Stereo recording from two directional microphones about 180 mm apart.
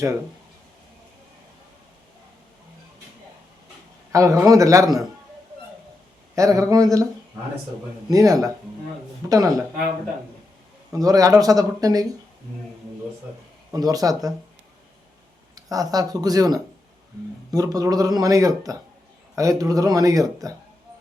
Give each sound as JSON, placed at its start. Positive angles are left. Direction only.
{"t": 4.1, "sound": "a man's voice", "side_deg": -20}
{"t": 6.3, "sound": "speech", "side_deg": -20}
{"t": 8.1, "sound": "speech", "side_deg": -20}
{"t": 10.9, "sound": "speech", "side_deg": -20}
{"t": 13.7, "sound": "speech", "side_deg": -20}
{"t": 15.5, "sound": "speech", "side_deg": -20}